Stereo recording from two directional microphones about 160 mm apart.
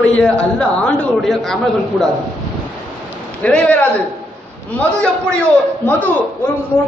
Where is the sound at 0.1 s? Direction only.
5° left (ahead or behind).